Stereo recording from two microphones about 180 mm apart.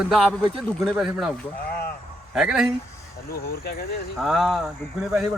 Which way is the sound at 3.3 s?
60° left (ahead or behind).